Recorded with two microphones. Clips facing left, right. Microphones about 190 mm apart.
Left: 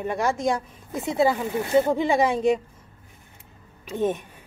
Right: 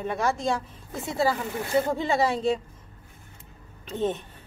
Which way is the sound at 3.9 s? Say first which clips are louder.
Left 3 dB; 10° left (ahead or behind).